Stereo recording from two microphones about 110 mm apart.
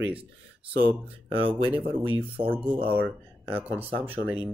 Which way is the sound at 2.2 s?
55° right (ahead or behind).